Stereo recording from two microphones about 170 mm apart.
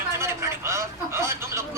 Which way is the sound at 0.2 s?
15° right (ahead or behind).